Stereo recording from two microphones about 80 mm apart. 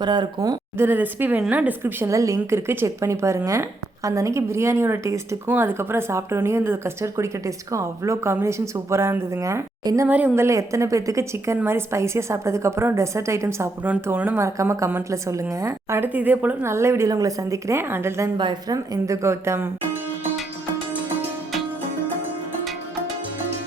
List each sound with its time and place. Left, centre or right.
0.0 s speech: right
0.8 s a woman's voice: right
1.8 s a woman's voice: right
5.5 s a woman's voice: right
10.1 s speech: centre
10.3 s a woman's voice: right
16.0 s speech: right
16.6 s a woman's voice: right
17.1 s a woman's voice: right
18.7 s a woman's voice: right